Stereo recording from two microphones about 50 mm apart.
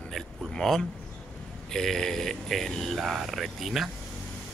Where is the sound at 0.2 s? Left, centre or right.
Centre.